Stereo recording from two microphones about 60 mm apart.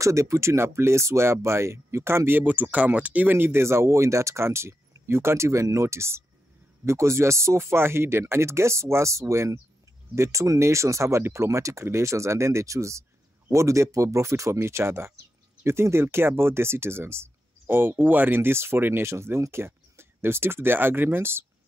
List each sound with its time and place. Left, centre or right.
0.0 s speech: right